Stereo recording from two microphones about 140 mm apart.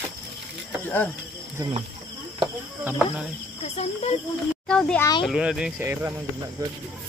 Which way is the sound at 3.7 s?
50° left (ahead or behind).